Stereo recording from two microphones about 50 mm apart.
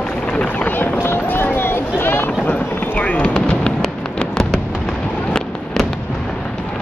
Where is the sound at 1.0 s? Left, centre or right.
Left.